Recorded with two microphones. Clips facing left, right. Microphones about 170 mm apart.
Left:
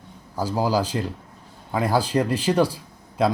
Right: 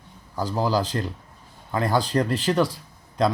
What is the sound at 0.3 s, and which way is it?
Speech, 10° left (ahead or behind).